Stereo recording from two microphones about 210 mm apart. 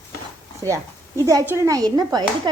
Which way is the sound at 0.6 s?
15° right (ahead or behind).